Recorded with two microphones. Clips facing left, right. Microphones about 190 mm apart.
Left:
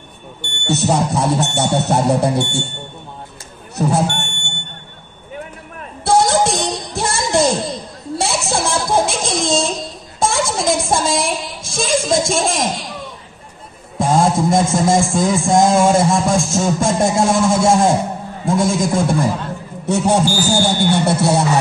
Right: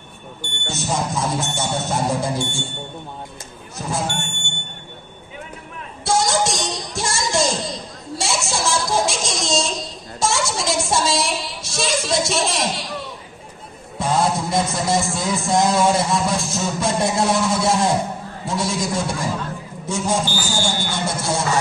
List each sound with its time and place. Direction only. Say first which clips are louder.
0.4 s speech: left 10 dB; 65° left (ahead or behind)
3.7 s speech: left 8 dB; 65° left (ahead or behind)
6.0 s music: left 5 dB; 60° left (ahead or behind)
8.2 s a sound: left 4 dB; 60° left (ahead or behind)
10.2 s speech: left 4 dB; 55° left (ahead or behind)
13.9 s music: left 5 dB; 50° left (ahead or behind)
19.9 s speech: left 7 dB; 65° left (ahead or behind)